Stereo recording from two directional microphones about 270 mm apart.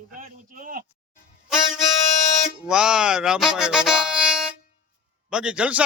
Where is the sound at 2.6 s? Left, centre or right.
Centre.